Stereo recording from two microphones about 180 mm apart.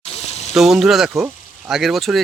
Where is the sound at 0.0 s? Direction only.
35° left (ahead or behind).